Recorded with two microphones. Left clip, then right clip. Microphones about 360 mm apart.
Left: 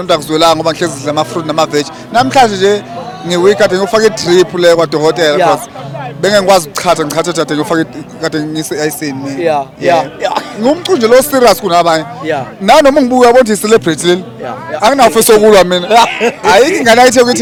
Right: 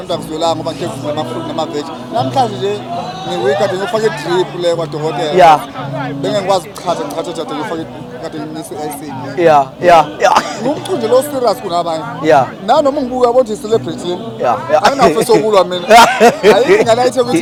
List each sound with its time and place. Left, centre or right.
0.1 s speech: left
9.4 s speech: centre
10.7 s speech: left
12.2 s speech: centre
12.6 s speech: left
16.6 s speech: left